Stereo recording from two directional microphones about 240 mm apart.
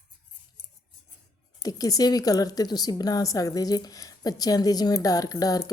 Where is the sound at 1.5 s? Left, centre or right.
Centre.